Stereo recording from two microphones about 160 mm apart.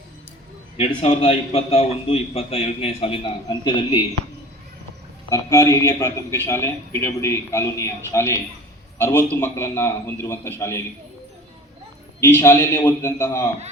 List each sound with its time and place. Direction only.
0.8 s a man's voice: 40° left (ahead or behind)
5.3 s a man's voice: 20° left (ahead or behind)
12.2 s a man's voice: 15° left (ahead or behind)